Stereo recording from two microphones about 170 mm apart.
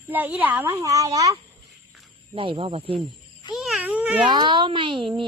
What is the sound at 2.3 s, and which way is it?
Speech, 30° right (ahead or behind).